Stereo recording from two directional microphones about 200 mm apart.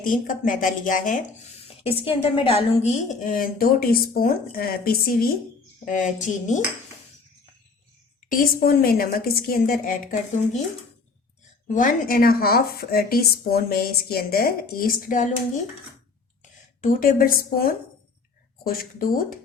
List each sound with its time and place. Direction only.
0.0 s a woman's voice: 40° left (ahead or behind)
1.6 s a woman's voice: 30° left (ahead or behind)
8.3 s a woman's voice: 50° left (ahead or behind)
11.7 s a woman's voice: 40° left (ahead or behind)
16.4 s a woman's voice: 45° left (ahead or behind)